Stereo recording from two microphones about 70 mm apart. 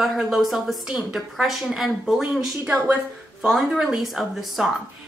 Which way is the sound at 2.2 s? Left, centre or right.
Centre.